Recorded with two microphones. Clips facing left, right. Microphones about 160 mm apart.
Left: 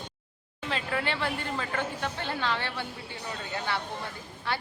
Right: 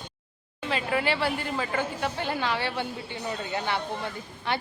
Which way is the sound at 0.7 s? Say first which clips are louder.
Right 4 dB; 5° right (ahead or behind).